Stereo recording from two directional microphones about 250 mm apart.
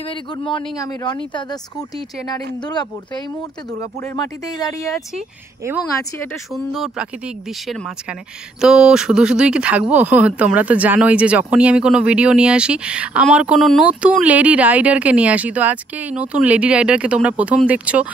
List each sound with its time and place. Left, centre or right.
0.0 s a man's voice: left
6.1 s speech: centre